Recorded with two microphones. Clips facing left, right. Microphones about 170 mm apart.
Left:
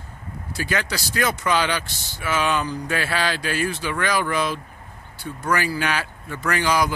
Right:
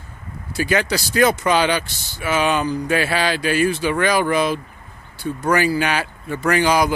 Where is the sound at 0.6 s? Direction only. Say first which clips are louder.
Right 6 dB; 15° right (ahead or behind).